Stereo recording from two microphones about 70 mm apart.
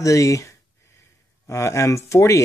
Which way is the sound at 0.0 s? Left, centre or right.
Left.